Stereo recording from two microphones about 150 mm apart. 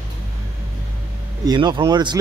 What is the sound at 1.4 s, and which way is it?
Speech, 30° right (ahead or behind).